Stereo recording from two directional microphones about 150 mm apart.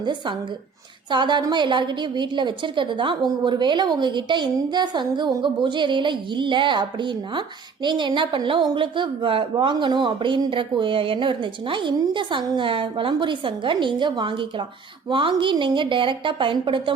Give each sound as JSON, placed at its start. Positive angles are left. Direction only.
{"t": 0.0, "sound": "speech", "side_deg": -30}